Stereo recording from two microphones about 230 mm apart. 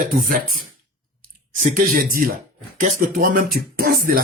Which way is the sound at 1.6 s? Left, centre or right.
Right.